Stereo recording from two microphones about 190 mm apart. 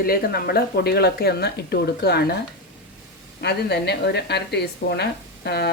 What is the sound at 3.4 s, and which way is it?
A woman's voice, 60° left (ahead or behind).